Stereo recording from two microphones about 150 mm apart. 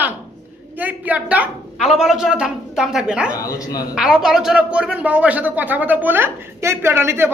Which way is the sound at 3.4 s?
25° left (ahead or behind).